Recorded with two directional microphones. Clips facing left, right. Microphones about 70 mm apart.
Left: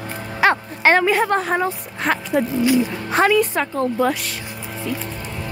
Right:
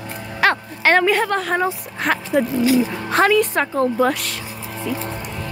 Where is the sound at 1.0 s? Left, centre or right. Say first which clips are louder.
Even; centre.